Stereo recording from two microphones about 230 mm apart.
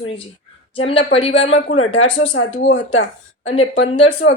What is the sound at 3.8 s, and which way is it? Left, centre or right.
Speech, left.